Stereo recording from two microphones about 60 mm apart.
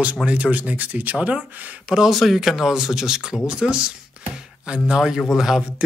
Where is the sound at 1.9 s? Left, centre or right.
Centre.